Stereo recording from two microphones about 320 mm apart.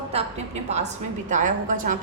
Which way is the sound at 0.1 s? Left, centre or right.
Centre.